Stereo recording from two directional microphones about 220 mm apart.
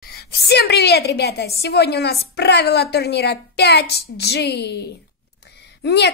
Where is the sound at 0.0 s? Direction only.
45° left (ahead or behind).